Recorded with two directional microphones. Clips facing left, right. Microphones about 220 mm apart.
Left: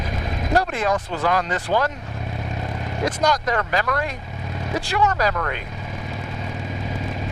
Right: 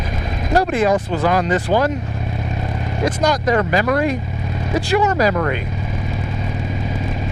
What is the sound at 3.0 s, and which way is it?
Speech, 5° right (ahead or behind).